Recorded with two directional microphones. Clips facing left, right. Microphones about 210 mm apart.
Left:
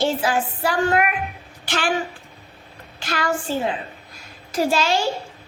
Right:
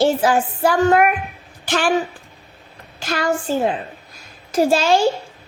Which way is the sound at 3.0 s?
45° right (ahead or behind).